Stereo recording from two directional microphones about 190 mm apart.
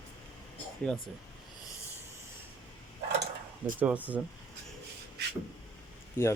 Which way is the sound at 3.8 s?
5° right (ahead or behind).